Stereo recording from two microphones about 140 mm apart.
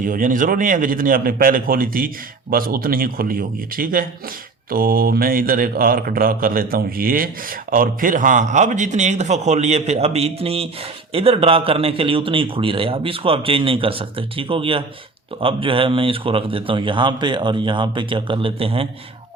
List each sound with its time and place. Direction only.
0.0 s a man's voice: 75° right (ahead or behind); by 18.9 s 40° right (ahead or behind)